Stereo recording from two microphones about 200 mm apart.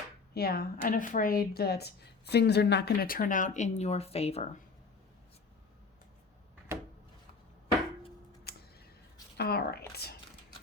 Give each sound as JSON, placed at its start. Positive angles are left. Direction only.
{"t": 0.3, "sound": "speech", "side_deg": 50}
{"t": 9.4, "sound": "speech", "side_deg": 50}